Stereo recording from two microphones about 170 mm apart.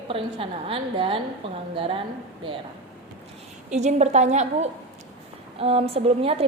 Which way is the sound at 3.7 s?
40° right (ahead or behind).